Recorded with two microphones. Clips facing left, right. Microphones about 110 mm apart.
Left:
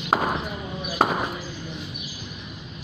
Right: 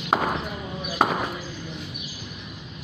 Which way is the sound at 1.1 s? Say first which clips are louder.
Even; 20° left (ahead or behind).